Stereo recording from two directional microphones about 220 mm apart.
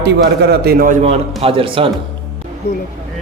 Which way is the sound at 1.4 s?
25° right (ahead or behind).